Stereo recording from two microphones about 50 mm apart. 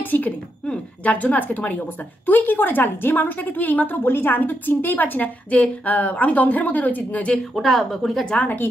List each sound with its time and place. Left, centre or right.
0.0 s a sound: left
1.0 s a woman's voice: left
7.5 s speech: centre